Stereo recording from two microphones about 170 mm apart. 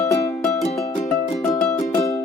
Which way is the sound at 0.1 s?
20° left (ahead or behind).